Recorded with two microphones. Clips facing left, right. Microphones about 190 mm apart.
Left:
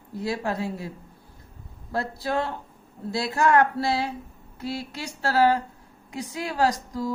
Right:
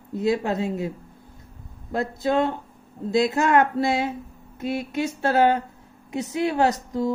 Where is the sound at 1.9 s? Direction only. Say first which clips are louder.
Right 4 dB; 20° right (ahead or behind).